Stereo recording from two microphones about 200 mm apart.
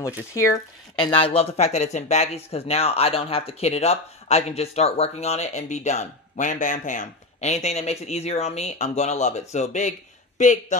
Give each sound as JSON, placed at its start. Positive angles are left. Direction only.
{"t": 0.3, "sound": "speech", "side_deg": 15}